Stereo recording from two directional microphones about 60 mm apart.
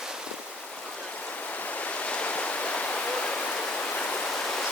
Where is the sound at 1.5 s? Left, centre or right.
Left.